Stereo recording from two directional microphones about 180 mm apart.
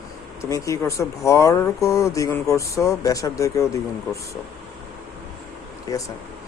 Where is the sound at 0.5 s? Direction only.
15° left (ahead or behind).